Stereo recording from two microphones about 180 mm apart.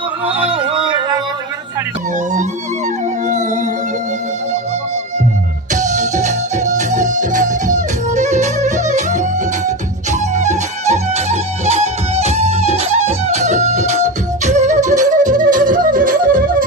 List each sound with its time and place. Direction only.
0.5 s yodeling: 30° right (ahead or behind)
3.2 s music: 45° right (ahead or behind)
5.7 s music: 40° right (ahead or behind)